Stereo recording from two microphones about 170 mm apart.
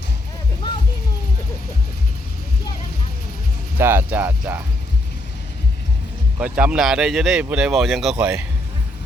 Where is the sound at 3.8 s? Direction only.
15° right (ahead or behind).